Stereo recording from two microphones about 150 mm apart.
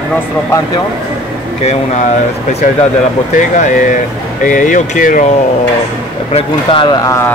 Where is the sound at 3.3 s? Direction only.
60° left (ahead or behind).